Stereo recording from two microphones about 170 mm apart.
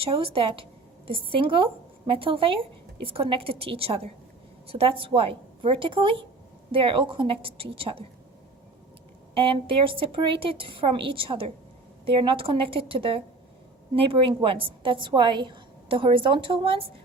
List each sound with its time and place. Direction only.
0.0 s a woman's voice: 35° right (ahead or behind)
9.3 s a woman's voice: 30° right (ahead or behind)